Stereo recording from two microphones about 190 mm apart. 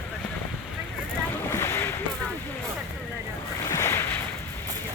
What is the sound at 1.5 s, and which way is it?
Boat, 15° left (ahead or behind).